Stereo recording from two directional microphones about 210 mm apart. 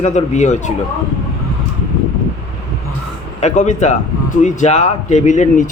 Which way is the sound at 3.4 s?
35° left (ahead or behind).